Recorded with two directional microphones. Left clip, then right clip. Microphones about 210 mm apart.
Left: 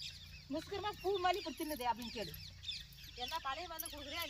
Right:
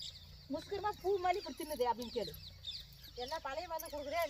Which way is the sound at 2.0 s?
60° left (ahead or behind).